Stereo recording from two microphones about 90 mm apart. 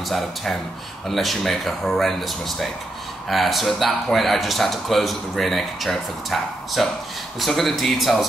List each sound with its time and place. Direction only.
0.1 s speech: centre (ahead or behind)